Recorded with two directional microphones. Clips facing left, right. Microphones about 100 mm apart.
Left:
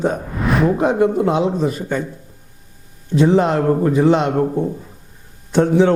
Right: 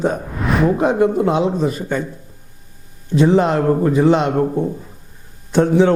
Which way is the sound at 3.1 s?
20° right (ahead or behind).